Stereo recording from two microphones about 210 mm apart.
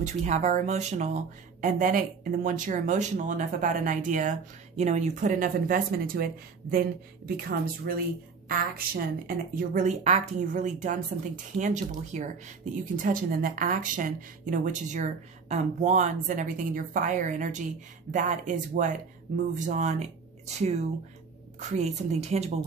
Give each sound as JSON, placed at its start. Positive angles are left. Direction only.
{"t": 0.0, "sound": "speech", "side_deg": -35}